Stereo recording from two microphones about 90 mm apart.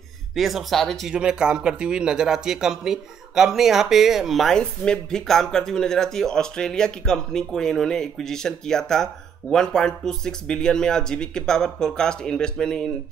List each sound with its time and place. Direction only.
0.3 s speech: centre (ahead or behind)
1.1 s speech: 10° right (ahead or behind); by 12.8 s 10° left (ahead or behind)